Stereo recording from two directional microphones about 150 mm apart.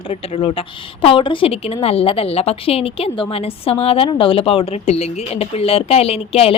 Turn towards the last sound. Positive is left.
turn(degrees=40)  # may be behind; listen again after turning